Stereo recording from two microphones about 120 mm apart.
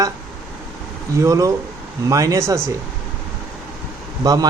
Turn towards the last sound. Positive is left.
turn(degrees=-30)  # may be behind; listen again after turning